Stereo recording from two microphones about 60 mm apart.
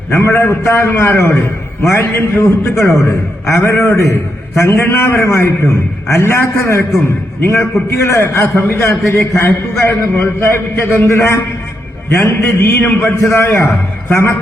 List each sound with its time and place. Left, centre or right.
0.1 s a man's voice: left
2.0 s a man's voice: left
2.6 s a man's voice: left
4.9 s a man's voice: left
5.2 s a man's voice: left